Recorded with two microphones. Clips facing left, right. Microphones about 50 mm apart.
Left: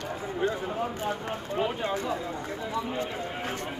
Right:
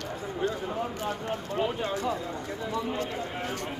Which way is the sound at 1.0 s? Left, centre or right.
Left.